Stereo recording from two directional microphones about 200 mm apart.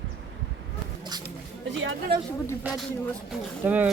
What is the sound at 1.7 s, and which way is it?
Speech, 65° right (ahead or behind).